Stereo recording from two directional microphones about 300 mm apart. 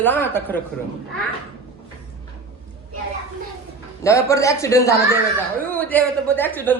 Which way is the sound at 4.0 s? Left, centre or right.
Centre.